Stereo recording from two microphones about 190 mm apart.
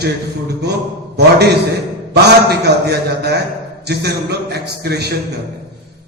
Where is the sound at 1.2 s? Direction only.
60° right (ahead or behind).